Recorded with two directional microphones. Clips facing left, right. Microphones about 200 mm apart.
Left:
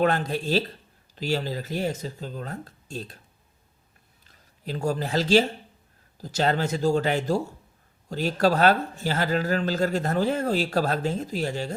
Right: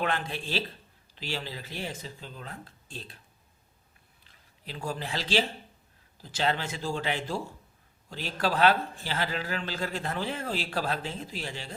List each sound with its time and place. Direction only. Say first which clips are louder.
0.0 s a man's voice: left 8 dB; 40° left (ahead or behind)
4.2 s a man's voice: left 10 dB; 45° left (ahead or behind)